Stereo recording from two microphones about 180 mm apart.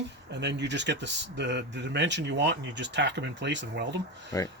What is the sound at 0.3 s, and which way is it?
Speech, 70° right (ahead or behind).